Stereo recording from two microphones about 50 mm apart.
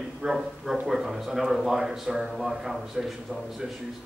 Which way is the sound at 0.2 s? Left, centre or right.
Centre.